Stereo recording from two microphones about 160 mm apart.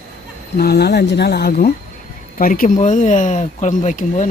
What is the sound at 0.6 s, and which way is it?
Speech, 85° left.